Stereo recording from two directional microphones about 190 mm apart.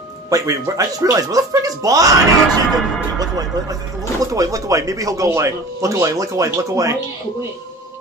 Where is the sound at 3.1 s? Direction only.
20° right (ahead or behind).